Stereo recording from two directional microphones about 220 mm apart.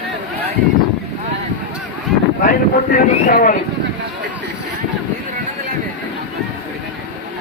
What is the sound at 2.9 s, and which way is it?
Speech, 40° left (ahead or behind).